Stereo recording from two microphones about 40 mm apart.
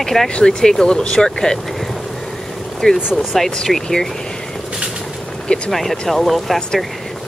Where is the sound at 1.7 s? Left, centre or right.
Centre.